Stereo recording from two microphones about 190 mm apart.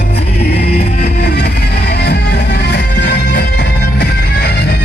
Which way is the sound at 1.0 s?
60° left (ahead or behind).